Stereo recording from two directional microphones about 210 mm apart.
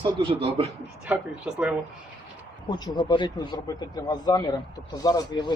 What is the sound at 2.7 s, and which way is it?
Speech, 20° left (ahead or behind).